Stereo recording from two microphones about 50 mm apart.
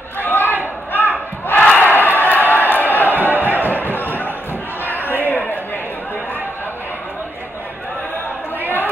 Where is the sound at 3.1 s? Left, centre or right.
Right.